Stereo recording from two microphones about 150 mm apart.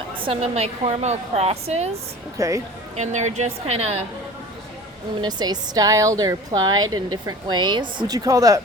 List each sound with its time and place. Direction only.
0.1 s a woman's voice: 35° right (ahead or behind)
2.4 s speech: 20° right (ahead or behind)
2.9 s a woman's voice: 50° right (ahead or behind)
5.2 s speech: 25° right (ahead or behind)